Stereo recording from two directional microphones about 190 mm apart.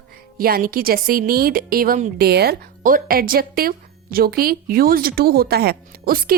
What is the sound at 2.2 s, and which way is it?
Speech, 55° right (ahead or behind).